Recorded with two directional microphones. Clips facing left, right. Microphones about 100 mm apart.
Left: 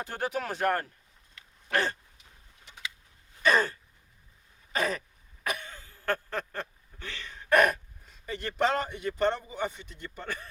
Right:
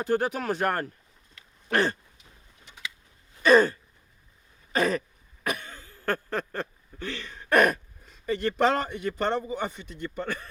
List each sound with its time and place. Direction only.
0.0 s a man's voice: 50° right (ahead or behind)
4.7 s throat clearing: 50° right (ahead or behind)
8.3 s speech: 55° right (ahead or behind)
9.4 s a man's voice: 45° right (ahead or behind)